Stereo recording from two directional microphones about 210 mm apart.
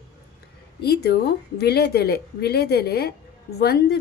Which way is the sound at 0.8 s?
50° left (ahead or behind).